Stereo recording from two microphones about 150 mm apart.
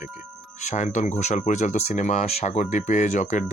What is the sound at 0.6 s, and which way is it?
Speech, 50° left (ahead or behind).